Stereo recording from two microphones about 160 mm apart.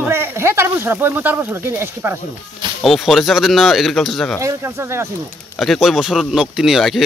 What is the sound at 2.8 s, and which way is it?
Speech, centre (ahead or behind).